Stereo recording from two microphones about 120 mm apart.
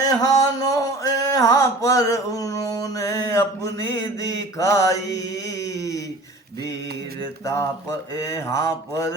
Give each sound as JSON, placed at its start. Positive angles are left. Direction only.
{"t": 0.0, "sound": "male singing", "side_deg": 30}
{"t": 8.2, "sound": "mantra", "side_deg": 25}